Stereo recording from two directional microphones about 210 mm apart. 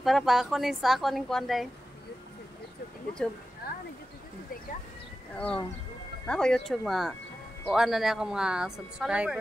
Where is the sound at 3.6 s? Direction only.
45° left (ahead or behind).